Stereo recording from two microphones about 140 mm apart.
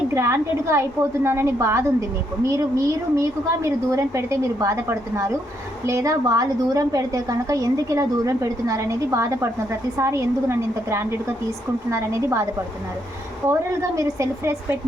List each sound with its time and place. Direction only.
0.1 s a woman's voice: 20° right (ahead or behind)
13.5 s a woman's voice: 20° right (ahead or behind)